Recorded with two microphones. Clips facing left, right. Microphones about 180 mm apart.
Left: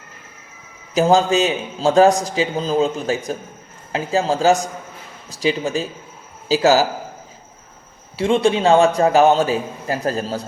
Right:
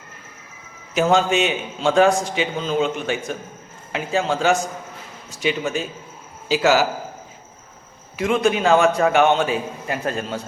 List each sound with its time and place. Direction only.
0.9 s a man's voice: 35° left (ahead or behind)
8.1 s a man's voice: 30° left (ahead or behind)